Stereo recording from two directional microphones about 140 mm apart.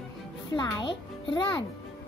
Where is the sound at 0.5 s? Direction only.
35° left (ahead or behind).